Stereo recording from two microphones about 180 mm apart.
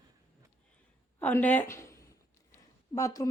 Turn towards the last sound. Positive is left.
turn(degrees=20)  # may be behind; listen again after turning